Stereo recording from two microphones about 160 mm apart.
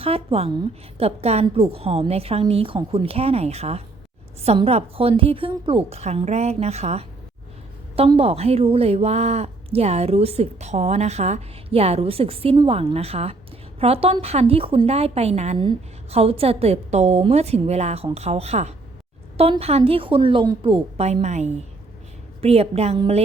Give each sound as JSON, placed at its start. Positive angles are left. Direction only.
{"t": 0.0, "sound": "a woman's voice", "side_deg": -35}